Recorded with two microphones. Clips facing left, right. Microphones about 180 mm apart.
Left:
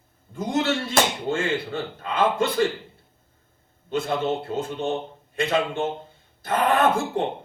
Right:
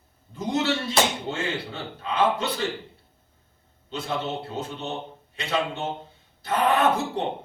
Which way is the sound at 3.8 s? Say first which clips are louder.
Left 5 dB; 50° left (ahead or behind).